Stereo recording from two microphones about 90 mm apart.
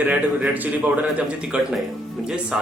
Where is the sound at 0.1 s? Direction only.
15° right (ahead or behind).